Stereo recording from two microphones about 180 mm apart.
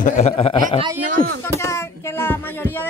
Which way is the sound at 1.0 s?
65° right (ahead or behind).